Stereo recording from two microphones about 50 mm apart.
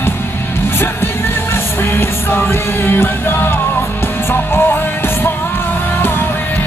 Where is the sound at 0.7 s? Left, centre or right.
Left.